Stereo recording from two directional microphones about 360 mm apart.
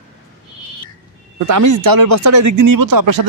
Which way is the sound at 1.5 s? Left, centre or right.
Right.